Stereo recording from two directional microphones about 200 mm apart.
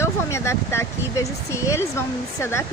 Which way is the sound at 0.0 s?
15° left (ahead or behind).